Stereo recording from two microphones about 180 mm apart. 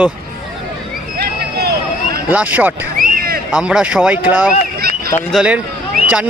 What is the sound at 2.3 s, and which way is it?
Speech, 10° right (ahead or behind).